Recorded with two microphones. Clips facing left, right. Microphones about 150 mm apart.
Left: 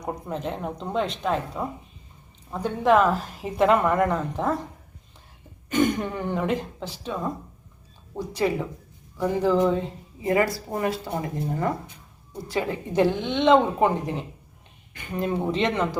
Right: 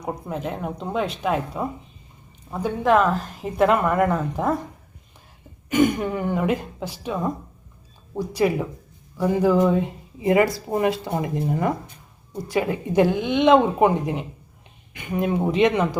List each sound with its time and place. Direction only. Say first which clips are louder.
0.0 s a woman's voice: right 1 dB; 5° right (ahead or behind)
5.6 s speech: right 3 dB; 10° right (ahead or behind)